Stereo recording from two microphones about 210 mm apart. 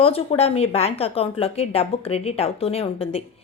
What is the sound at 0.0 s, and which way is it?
A woman's voice, 25° left (ahead or behind).